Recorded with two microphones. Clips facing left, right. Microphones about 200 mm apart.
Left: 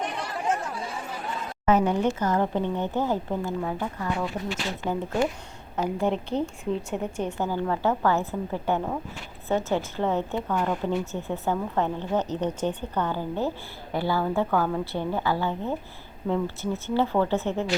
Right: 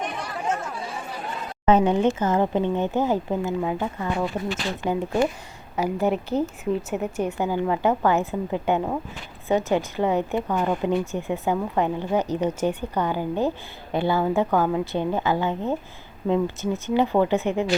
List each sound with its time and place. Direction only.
1.6 s a woman's voice: 25° right (ahead or behind)
16.8 s a woman's voice: 15° right (ahead or behind)